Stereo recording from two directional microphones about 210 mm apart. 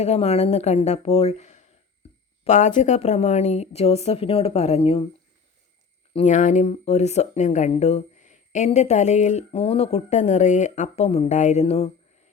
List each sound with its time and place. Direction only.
0.0 s speech: 30° left (ahead or behind)
6.1 s speech: 35° left (ahead or behind)